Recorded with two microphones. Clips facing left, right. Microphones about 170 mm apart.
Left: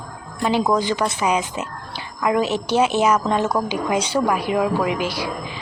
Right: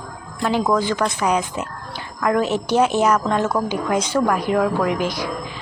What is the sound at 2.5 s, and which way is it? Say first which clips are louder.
Speech: right 1 dB; 15° right (ahead or behind).